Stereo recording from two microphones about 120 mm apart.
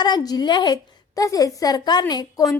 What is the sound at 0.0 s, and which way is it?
A woman's voice, 35° left (ahead or behind).